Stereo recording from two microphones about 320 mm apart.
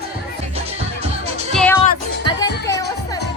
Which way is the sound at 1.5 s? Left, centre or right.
Centre.